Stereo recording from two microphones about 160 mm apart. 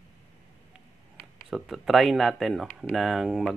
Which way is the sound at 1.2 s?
5° left (ahead or behind).